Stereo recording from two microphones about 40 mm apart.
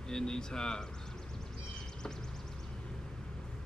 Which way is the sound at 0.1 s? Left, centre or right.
Centre.